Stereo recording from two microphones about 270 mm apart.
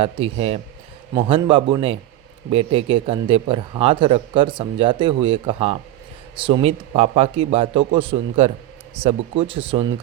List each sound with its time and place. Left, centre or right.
0.0 s a man's voice: right